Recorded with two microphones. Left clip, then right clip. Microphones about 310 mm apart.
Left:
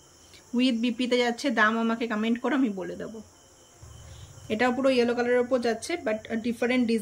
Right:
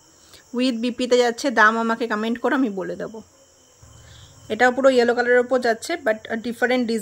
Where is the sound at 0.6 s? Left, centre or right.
Centre.